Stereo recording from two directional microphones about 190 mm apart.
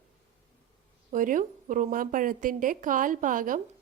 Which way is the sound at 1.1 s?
45° right (ahead or behind).